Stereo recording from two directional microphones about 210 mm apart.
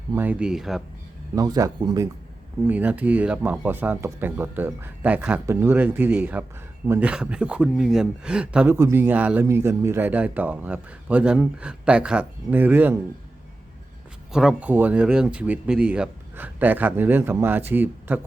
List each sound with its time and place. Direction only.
0.1 s speech: 10° right (ahead or behind)
1.4 s speech: 15° right (ahead or behind)
2.6 s speech: 5° right (ahead or behind)
14.3 s speech: 5° right (ahead or behind)